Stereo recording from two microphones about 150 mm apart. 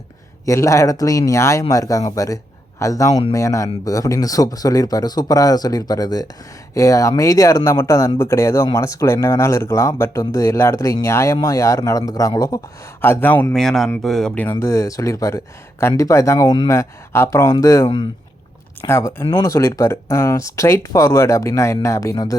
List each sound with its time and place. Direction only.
0.4 s speech: 20° left (ahead or behind)
14.6 s speech: 20° left (ahead or behind)
17.8 s speech: 35° left (ahead or behind)
18.9 s speech: 20° left (ahead or behind)
19.2 s speech: 40° left (ahead or behind)
19.5 s speech: 20° left (ahead or behind)